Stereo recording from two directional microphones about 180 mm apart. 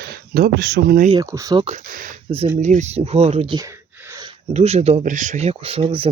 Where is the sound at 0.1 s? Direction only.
60° right (ahead or behind).